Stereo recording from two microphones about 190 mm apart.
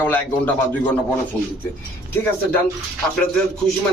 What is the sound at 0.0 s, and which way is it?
Speech, 10° left (ahead or behind).